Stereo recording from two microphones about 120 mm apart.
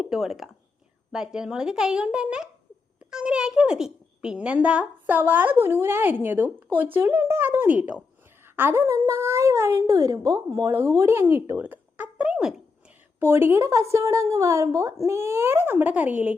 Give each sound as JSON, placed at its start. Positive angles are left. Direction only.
{"t": 0.0, "sound": "a woman's voice", "side_deg": -5}
{"t": 13.1, "sound": "a woman's voice", "side_deg": -20}